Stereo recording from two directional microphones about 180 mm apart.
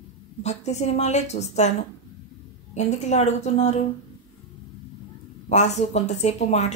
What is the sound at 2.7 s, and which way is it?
Speech, 40° left (ahead or behind).